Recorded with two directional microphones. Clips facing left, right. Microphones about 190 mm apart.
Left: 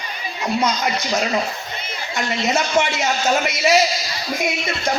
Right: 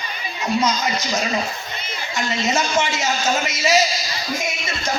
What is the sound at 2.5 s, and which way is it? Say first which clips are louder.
A man's voice: left 3 dB; 60° left (ahead or behind).